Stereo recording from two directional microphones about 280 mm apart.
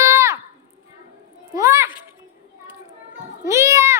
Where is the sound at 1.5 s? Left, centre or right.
Centre.